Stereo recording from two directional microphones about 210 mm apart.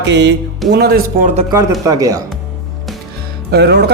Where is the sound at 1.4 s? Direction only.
20° right (ahead or behind).